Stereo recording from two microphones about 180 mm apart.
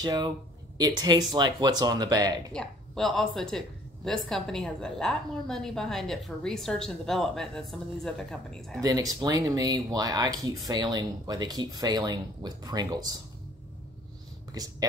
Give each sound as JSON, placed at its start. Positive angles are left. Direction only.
{"t": 0.0, "sound": "speech", "side_deg": -20}
{"t": 2.5, "sound": "speech", "side_deg": 5}
{"t": 8.8, "sound": "speech", "side_deg": -20}
{"t": 14.5, "sound": "speech", "side_deg": -20}